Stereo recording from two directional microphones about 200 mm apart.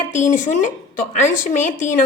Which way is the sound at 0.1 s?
40° left (ahead or behind).